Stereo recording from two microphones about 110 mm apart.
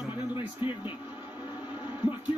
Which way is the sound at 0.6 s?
50° left (ahead or behind).